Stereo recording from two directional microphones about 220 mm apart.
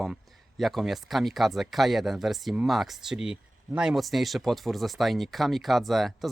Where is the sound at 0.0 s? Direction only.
Centre (ahead or behind).